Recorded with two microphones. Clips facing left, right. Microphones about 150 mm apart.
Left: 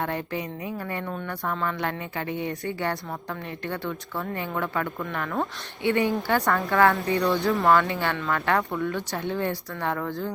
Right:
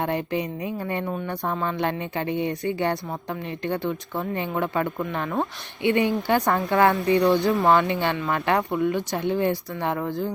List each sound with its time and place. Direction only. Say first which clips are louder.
0.0 s speech: right 4 dB; 20° right (ahead or behind)